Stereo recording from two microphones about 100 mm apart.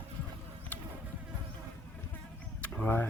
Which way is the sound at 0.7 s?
15° left (ahead or behind).